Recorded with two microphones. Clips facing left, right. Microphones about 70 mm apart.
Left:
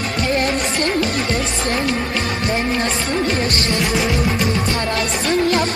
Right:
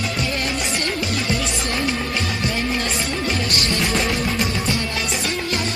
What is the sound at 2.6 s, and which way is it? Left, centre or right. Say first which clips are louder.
Music: left 3 dB; left.